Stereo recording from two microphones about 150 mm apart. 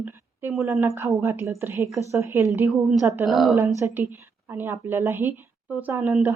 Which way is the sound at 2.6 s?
Centre (ahead or behind).